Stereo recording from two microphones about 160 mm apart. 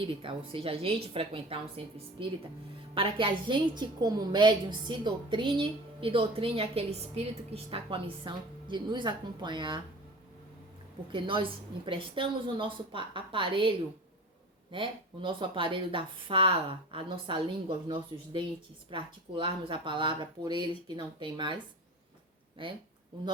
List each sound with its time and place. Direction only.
0.0 s a woman's voice: 35° right (ahead or behind)
11.1 s a woman's voice: 30° right (ahead or behind)
22.6 s a woman's voice: 30° right (ahead or behind)